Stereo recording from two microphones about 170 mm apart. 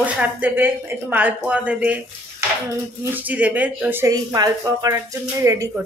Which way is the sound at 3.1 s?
10° right (ahead or behind).